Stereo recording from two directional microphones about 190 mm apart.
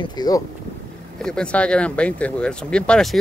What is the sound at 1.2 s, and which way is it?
Speech, 5° left (ahead or behind).